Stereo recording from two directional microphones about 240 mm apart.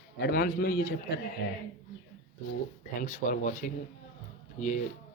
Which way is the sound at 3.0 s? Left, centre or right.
Left.